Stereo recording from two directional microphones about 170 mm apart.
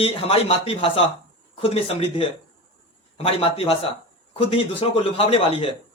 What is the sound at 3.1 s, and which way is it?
A man's voice, 35° left (ahead or behind).